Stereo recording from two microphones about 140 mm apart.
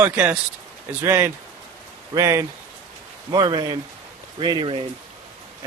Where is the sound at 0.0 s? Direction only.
15° right (ahead or behind); by 4.8 s 35° right (ahead or behind).